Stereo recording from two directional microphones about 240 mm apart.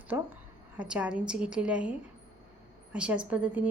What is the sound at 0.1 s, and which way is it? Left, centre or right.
A woman's voice, centre.